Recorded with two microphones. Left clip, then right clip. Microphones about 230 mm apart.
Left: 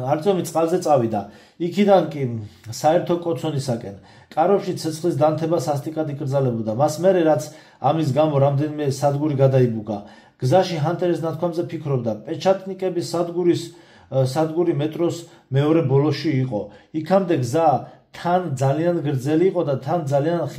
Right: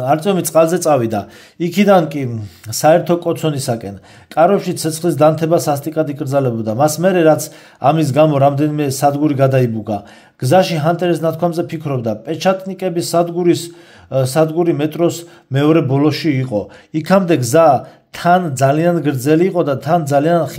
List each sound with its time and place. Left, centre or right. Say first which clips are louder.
0.0 s speech: right 5 dB; right